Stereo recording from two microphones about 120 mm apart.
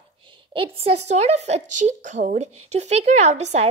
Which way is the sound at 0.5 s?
50° right (ahead or behind).